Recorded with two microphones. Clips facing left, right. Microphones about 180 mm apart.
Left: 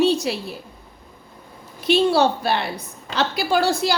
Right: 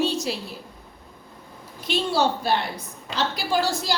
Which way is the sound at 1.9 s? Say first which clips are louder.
Left 6 dB; 65° left (ahead or behind).